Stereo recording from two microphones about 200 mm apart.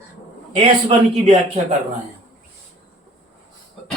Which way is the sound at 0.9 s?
30° right (ahead or behind).